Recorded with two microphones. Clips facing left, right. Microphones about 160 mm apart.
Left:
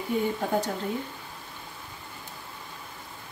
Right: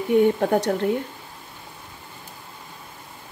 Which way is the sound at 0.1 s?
65° right (ahead or behind).